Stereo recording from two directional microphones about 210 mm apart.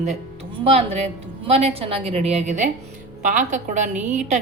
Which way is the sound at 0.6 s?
30° right (ahead or behind).